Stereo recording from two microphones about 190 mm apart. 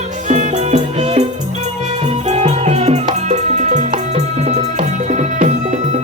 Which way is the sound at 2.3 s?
35° right (ahead or behind).